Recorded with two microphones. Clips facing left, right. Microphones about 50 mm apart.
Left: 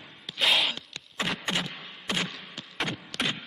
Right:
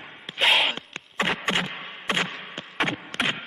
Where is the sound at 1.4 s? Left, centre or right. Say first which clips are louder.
Right 5 dB; right.